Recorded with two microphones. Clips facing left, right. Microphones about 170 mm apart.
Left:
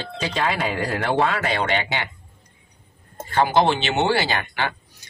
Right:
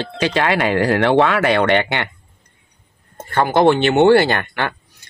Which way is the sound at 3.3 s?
55° right (ahead or behind).